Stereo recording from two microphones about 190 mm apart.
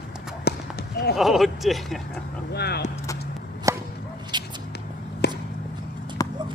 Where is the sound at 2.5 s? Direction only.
60° left (ahead or behind).